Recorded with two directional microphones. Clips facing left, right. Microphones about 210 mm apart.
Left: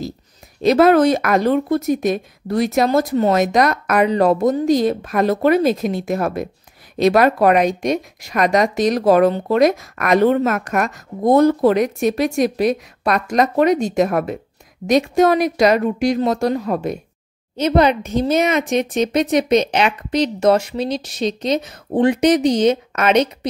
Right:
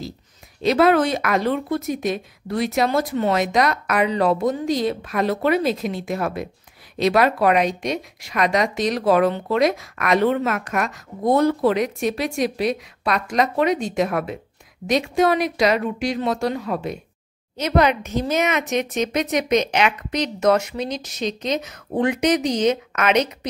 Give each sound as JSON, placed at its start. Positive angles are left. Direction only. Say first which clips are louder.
{"t": 0.6, "sound": "a woman's voice", "louder": "left 4 dB", "side_deg": 45}
{"t": 17.6, "sound": "speech", "louder": "left 4 dB", "side_deg": 30}